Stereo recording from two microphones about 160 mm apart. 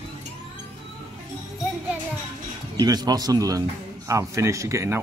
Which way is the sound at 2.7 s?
25° right (ahead or behind).